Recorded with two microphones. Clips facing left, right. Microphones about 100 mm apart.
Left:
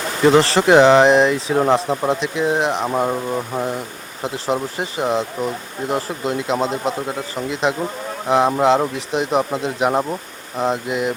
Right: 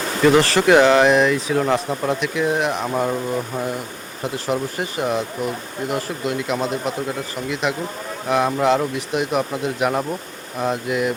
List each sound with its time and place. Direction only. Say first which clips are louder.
0.3 s speech: left 1 dB; 25° left (ahead or behind)